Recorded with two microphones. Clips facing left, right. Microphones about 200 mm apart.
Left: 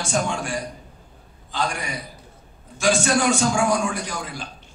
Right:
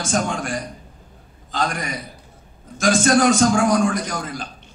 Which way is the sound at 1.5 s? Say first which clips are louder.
Right 2 dB; 45° right (ahead or behind).